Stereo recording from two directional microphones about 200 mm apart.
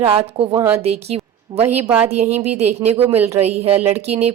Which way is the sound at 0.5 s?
10° right (ahead or behind).